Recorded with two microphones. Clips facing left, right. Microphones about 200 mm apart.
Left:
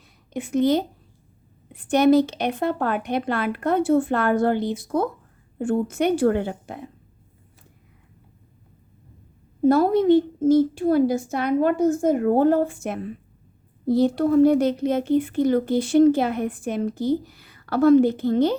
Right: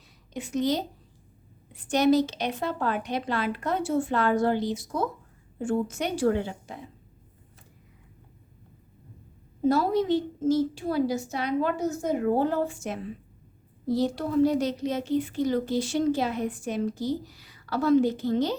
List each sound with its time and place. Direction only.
0.3 s speech: 55° left (ahead or behind)
9.6 s a woman's voice: 55° left (ahead or behind)